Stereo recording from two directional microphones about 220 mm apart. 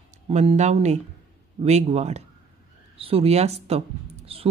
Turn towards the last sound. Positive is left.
turn(degrees=-25)  # may be behind; listen again after turning